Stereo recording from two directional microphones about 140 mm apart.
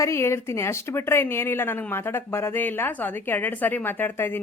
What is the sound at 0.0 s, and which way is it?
A woman's voice, 20° left (ahead or behind).